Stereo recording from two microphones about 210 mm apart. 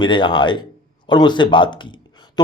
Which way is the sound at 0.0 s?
20° left (ahead or behind).